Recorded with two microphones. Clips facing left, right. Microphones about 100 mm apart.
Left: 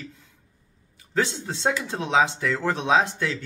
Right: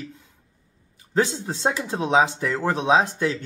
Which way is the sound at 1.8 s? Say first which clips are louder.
Right 3 dB; 15° right (ahead or behind).